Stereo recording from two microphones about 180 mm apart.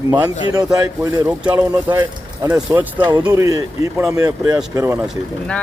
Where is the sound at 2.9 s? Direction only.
20° right (ahead or behind).